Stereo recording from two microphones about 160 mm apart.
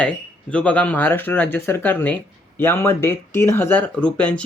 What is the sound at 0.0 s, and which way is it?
Speech, 5° left (ahead or behind).